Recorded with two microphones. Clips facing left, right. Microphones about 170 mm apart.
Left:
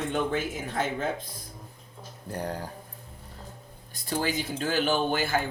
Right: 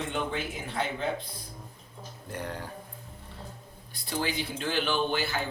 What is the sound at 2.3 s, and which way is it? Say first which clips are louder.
Speech: left 4 dB; 40° left (ahead or behind).